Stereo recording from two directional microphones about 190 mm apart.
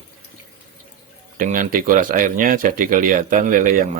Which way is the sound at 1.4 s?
45° right (ahead or behind).